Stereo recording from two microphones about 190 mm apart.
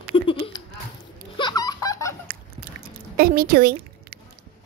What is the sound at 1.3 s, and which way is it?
Laughter, 20° left (ahead or behind).